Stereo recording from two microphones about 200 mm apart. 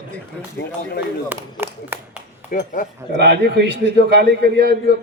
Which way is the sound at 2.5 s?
45° left (ahead or behind).